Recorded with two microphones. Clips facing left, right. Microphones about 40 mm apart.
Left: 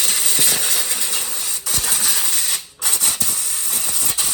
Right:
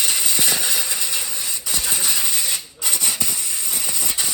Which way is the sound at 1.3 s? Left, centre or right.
Right.